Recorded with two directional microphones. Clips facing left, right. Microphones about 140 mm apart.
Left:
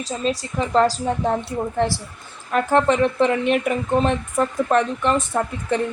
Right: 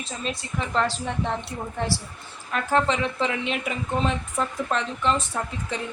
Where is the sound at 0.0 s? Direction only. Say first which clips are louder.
Left 8 dB; 35° left (ahead or behind).